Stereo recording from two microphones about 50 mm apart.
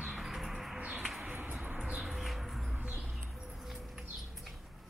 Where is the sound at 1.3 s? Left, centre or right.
Right.